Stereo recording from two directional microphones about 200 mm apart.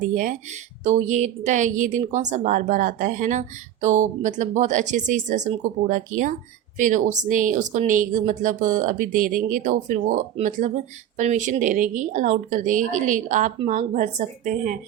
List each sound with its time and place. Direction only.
0.1 s a woman's voice: 40° right (ahead or behind)